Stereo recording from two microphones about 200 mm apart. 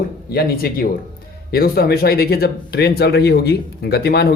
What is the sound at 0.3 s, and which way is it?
Speech, 50° left (ahead or behind).